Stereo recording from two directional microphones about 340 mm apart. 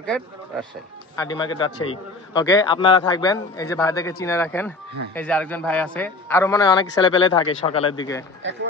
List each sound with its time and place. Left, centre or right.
0.0 s a man's voice: centre
8.4 s speech: right